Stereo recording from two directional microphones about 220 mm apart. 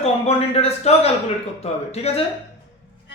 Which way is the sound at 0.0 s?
30° left (ahead or behind).